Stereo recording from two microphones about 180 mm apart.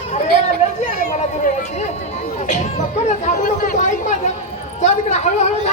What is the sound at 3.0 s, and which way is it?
Chatter, 45° left (ahead or behind).